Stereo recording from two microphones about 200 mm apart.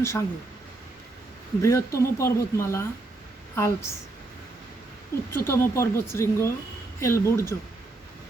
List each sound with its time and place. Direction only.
0.0 s speech: 15° left (ahead or behind)
1.6 s speech: 15° left (ahead or behind)
5.5 s speech: 15° left (ahead or behind)